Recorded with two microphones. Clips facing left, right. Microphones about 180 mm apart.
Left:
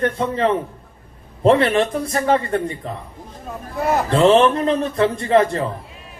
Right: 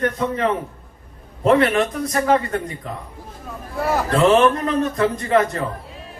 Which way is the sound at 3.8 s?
25° left (ahead or behind).